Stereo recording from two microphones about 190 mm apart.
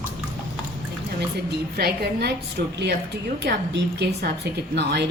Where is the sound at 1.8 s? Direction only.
55° right (ahead or behind).